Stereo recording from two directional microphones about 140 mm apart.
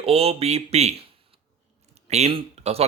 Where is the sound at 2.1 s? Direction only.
50° right (ahead or behind).